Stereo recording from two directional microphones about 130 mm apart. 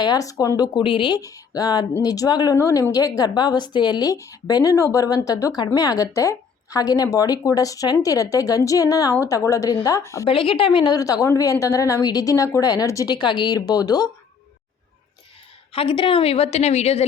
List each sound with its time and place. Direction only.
0.0 s a woman's voice: 30° left (ahead or behind)
1.2 s a woman's voice: 25° left (ahead or behind)
10.2 s a woman's voice: 45° left (ahead or behind)
15.7 s a woman's voice: 45° left (ahead or behind)